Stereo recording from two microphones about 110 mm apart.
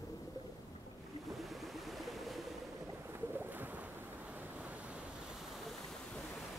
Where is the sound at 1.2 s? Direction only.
Centre (ahead or behind).